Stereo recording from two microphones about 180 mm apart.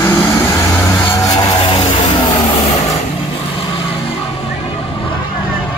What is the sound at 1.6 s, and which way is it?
Music, 30° left (ahead or behind).